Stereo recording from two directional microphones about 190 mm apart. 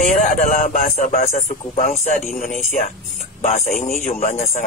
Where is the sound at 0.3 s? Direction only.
45° left (ahead or behind).